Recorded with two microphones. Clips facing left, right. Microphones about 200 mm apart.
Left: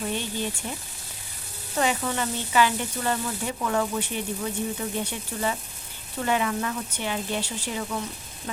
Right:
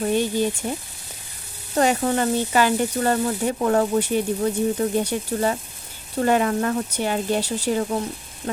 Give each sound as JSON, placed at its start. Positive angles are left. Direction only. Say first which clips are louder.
{"t": 0.0, "sound": "sizzle", "louder": "right 9 dB", "side_deg": -45}
{"t": 1.7, "sound": "sizzle", "louder": "right 6 dB", "side_deg": -45}